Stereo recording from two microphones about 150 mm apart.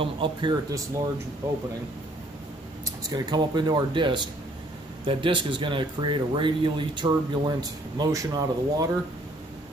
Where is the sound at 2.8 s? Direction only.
25° right (ahead or behind).